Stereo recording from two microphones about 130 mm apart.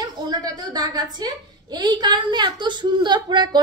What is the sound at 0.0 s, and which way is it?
A woman's voice, 30° right (ahead or behind).